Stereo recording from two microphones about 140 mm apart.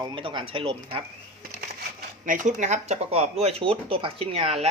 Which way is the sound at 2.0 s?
70° right (ahead or behind).